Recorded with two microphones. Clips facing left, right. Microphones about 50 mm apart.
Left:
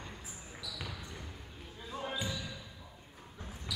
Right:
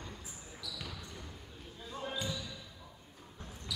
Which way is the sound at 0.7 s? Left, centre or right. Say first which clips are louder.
Left 1 dB; centre.